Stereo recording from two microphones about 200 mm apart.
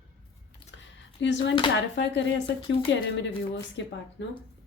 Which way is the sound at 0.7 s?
60° left (ahead or behind).